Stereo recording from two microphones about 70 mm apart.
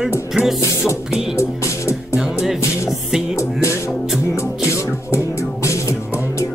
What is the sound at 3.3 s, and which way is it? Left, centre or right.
Music, left.